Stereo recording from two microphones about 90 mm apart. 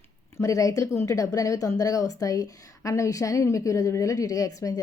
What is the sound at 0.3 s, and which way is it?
Speech, 40° left (ahead or behind).